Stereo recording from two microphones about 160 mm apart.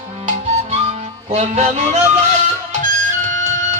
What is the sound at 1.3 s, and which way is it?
Music, 45° right (ahead or behind).